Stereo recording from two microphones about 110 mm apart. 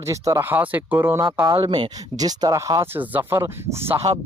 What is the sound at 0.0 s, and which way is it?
Speech, 30° right (ahead or behind).